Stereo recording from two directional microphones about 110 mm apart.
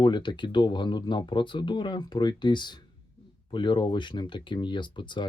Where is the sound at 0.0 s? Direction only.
45° left (ahead or behind).